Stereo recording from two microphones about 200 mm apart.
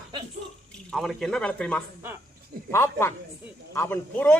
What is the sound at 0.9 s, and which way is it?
A man's voice, centre (ahead or behind).